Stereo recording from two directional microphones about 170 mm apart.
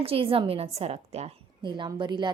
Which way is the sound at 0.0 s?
35° right (ahead or behind).